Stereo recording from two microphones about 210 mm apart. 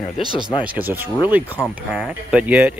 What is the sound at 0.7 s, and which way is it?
Speech, 10° right (ahead or behind).